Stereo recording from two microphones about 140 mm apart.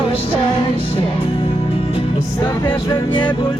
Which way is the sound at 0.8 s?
40° left (ahead or behind).